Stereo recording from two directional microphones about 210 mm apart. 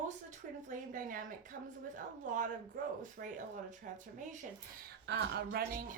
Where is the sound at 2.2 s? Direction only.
40° right (ahead or behind).